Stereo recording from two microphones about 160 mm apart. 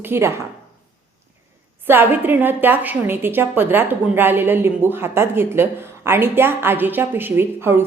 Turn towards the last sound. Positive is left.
turn(degrees=-15)  # may be behind; listen again after turning